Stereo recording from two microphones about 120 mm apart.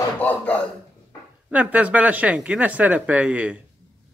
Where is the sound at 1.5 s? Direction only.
10° right (ahead or behind).